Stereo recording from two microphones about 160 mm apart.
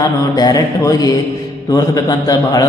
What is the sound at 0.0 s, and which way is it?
A man's voice, 25° left (ahead or behind).